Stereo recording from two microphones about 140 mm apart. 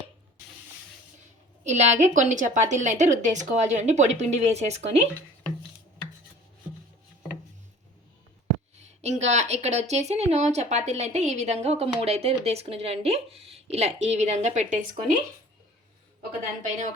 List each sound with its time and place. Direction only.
1.6 s a woman's voice: 55° right (ahead or behind)
9.0 s speech: 50° right (ahead or behind)
16.4 s a woman's voice: 65° right (ahead or behind)